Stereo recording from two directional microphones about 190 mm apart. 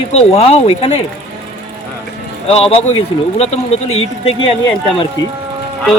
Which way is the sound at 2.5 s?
30° left (ahead or behind).